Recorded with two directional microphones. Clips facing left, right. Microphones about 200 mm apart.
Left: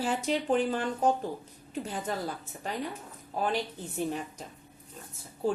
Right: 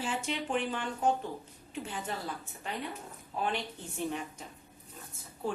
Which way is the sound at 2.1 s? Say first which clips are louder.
Left 4 dB; 40° left (ahead or behind).